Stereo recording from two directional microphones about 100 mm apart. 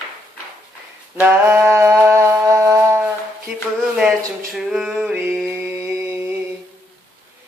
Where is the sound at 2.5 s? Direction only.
30° right (ahead or behind).